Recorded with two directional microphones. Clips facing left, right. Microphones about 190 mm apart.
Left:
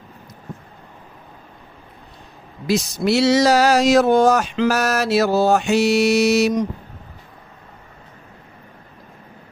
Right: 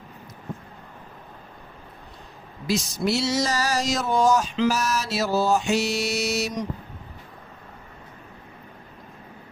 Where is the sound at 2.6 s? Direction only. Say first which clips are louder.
Left 5 dB; 65° left (ahead or behind).